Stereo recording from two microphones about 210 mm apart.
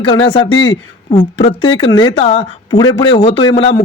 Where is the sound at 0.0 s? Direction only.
25° left (ahead or behind).